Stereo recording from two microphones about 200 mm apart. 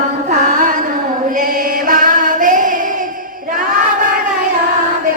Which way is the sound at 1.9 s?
40° right (ahead or behind).